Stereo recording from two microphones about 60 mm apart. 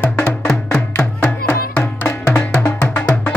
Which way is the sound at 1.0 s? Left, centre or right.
Left.